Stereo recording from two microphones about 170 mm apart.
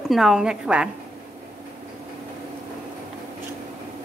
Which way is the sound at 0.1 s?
Centre (ahead or behind).